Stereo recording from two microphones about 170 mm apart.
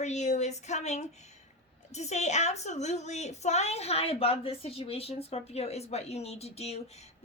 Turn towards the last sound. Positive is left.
turn(degrees=40)  # may be behind; listen again after turning